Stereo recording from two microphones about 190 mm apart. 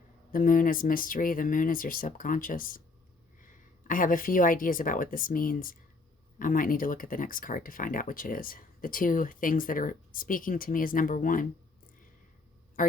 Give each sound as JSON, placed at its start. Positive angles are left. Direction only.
{"t": 0.3, "sound": "a woman's voice", "side_deg": 45}